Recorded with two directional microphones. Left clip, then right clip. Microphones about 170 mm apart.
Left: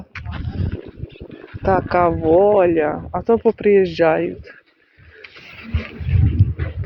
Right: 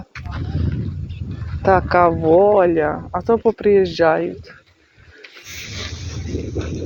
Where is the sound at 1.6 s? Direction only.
15° right (ahead or behind).